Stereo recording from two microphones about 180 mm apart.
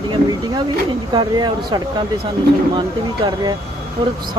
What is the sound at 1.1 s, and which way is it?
Speech, 25° right (ahead or behind).